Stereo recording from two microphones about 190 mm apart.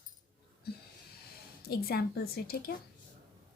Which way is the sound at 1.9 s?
55° left (ahead or behind).